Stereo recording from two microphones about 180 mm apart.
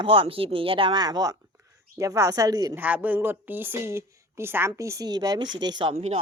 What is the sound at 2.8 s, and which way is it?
A woman's voice, 10° right (ahead or behind).